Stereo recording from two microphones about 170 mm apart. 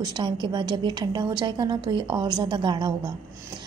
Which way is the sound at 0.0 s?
25° right (ahead or behind).